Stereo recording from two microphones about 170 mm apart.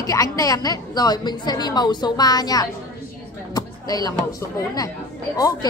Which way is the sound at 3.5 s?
20° left (ahead or behind).